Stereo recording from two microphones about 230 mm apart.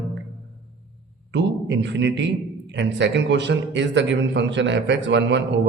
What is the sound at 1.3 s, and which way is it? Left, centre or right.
A man's voice, right.